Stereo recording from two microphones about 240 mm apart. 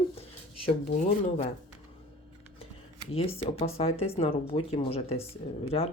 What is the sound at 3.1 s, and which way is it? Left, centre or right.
Speech, left.